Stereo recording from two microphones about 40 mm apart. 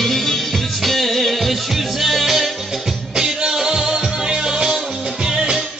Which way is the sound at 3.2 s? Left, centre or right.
Centre.